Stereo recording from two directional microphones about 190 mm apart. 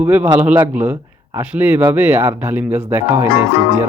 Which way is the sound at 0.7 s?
10° right (ahead or behind).